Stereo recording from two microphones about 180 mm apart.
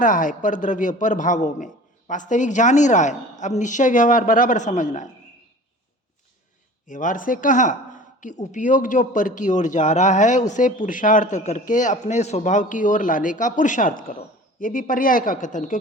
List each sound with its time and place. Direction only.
0.0 s speech: 45° left (ahead or behind)
6.8 s speech: 45° left (ahead or behind)